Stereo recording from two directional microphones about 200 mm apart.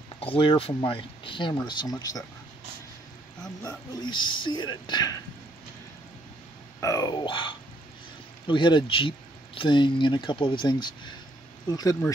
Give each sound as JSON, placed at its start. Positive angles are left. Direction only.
{"t": 0.2, "sound": "speech", "side_deg": 25}
{"t": 3.6, "sound": "speech", "side_deg": 20}
{"t": 6.8, "sound": "speech", "side_deg": 15}